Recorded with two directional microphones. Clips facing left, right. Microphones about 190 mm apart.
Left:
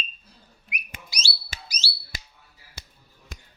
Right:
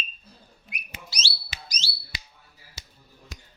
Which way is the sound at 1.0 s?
10° left (ahead or behind).